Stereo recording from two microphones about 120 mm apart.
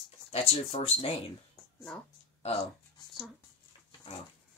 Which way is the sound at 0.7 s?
50° left (ahead or behind).